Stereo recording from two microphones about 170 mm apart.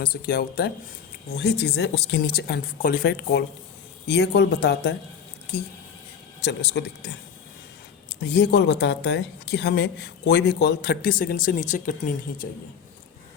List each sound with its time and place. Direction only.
0.0 s speech: 65° left (ahead or behind)
1.3 s a woman's voice: 75° left (ahead or behind)
6.4 s speech: 85° left
8.2 s a woman's voice: 80° left; by 12.5 s 55° left (ahead or behind)